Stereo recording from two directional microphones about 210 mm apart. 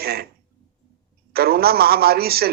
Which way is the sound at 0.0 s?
50° right (ahead or behind).